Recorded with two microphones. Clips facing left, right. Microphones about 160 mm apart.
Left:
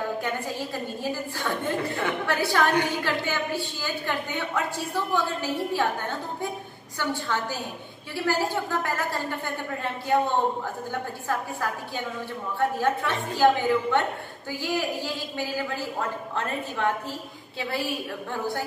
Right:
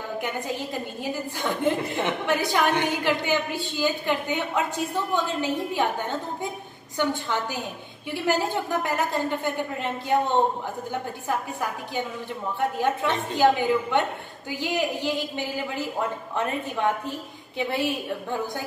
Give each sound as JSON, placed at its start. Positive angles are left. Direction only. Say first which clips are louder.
{"t": 1.4, "sound": "a woman's voice", "louder": "right 4 dB", "side_deg": -20}
{"t": 12.5, "sound": "a woman's voice", "louder": "left 1 dB", "side_deg": -20}